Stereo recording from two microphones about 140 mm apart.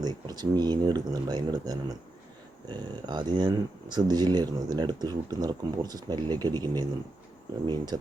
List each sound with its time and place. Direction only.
0.0 s speech: 30° right (ahead or behind)